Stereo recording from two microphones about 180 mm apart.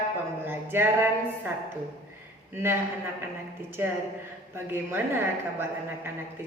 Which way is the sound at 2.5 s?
15° right (ahead or behind).